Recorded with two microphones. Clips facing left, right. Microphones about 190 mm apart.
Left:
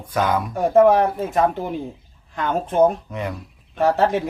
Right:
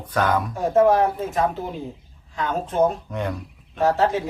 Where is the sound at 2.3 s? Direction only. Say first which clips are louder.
Left 3 dB; 55° left (ahead or behind).